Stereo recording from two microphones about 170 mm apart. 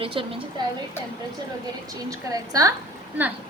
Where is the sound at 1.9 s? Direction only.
20° right (ahead or behind).